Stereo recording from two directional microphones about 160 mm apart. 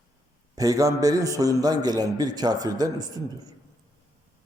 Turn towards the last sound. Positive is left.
turn(degrees=-25)  # may be behind; listen again after turning